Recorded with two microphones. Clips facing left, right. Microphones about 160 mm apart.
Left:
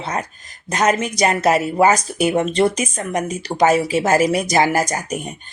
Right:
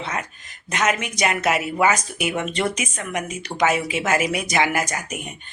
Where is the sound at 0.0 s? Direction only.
35° left (ahead or behind).